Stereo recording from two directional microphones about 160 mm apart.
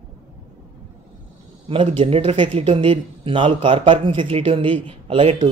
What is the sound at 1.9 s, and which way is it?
Speech, 35° right (ahead or behind).